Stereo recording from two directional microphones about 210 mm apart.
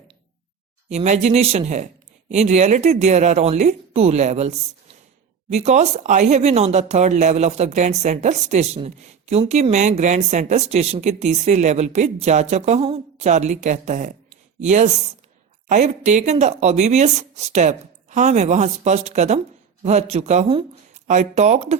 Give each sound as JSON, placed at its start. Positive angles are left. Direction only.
{"t": 0.9, "sound": "speech", "side_deg": -35}